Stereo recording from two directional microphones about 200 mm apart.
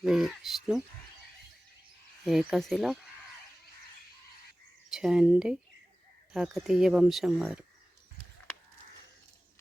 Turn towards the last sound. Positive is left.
turn(degrees=-5)  # may be behind; listen again after turning